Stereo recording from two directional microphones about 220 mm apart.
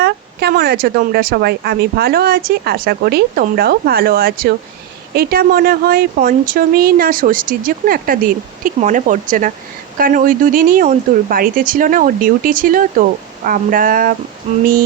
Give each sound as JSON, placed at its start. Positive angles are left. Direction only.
{"t": 0.0, "sound": "speech", "side_deg": -45}
{"t": 14.5, "sound": "speech", "side_deg": -30}